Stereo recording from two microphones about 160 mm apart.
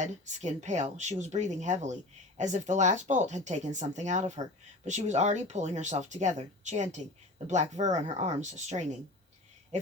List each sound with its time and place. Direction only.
0.0 s speech: 50° right (ahead or behind)